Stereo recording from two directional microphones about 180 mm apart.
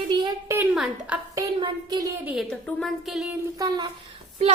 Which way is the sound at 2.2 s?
Centre (ahead or behind).